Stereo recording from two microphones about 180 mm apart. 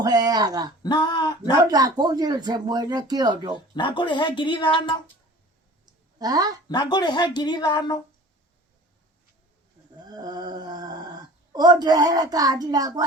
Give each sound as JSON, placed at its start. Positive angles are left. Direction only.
{"t": 0.0, "sound": "speech", "side_deg": -20}
{"t": 0.8, "sound": "speech", "side_deg": 25}
{"t": 1.6, "sound": "speech", "side_deg": -20}
{"t": 3.5, "sound": "speech", "side_deg": 25}
{"t": 5.8, "sound": "a sound", "side_deg": -20}
{"t": 6.7, "sound": "speech", "side_deg": 25}
{"t": 10.0, "sound": "speech", "side_deg": -20}